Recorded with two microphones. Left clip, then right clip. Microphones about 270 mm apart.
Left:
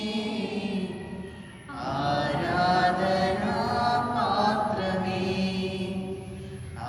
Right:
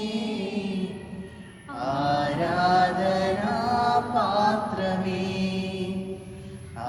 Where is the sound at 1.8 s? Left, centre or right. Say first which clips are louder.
Right 3 dB; right.